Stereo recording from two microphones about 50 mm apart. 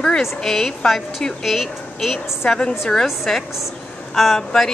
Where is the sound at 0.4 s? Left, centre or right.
Centre.